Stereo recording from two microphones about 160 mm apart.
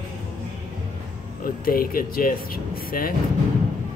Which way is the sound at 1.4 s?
65° left (ahead or behind).